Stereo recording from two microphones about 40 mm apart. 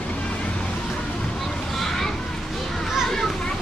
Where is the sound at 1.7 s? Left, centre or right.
Centre.